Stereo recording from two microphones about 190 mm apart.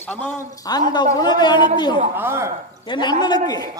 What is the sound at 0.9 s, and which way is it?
Speech, 20° left (ahead or behind).